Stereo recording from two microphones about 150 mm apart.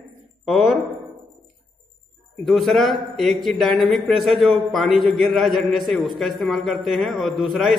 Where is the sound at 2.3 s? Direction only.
Centre (ahead or behind).